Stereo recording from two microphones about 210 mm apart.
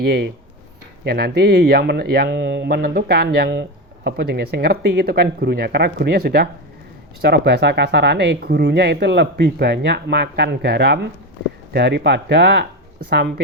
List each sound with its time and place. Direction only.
0.0 s speech: 50° right (ahead or behind)